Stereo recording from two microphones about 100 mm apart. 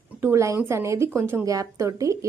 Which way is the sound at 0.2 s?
30° right (ahead or behind).